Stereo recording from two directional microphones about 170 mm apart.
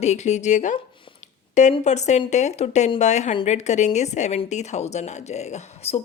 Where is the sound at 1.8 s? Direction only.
40° left (ahead or behind).